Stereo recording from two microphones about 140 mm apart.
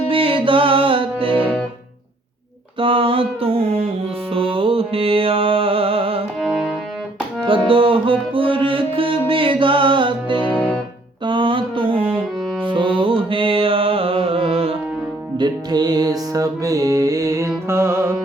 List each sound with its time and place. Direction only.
0.1 s music: 40° right (ahead or behind)
1.4 s music: 5° left (ahead or behind)
2.7 s mantra: 40° right (ahead or behind)
4.3 s music: 40° right (ahead or behind)
6.4 s music: 5° right (ahead or behind)
7.4 s music: 40° right (ahead or behind)
10.4 s music: 10° left (ahead or behind)
11.3 s mantra: 35° right (ahead or behind)
12.6 s music: 35° right (ahead or behind)
15.4 s music: 30° right (ahead or behind)